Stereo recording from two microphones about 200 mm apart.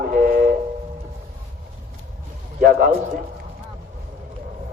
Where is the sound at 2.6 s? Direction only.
45° right (ahead or behind).